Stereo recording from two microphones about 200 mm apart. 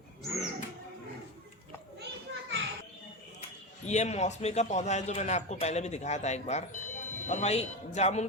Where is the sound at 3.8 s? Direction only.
35° left (ahead or behind).